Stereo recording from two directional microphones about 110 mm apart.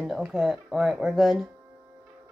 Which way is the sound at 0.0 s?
5° right (ahead or behind).